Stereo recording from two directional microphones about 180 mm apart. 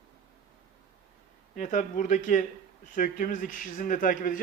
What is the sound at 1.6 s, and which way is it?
Speech, 45° left (ahead or behind).